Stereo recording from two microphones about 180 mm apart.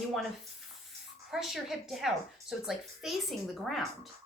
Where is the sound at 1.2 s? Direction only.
Centre (ahead or behind).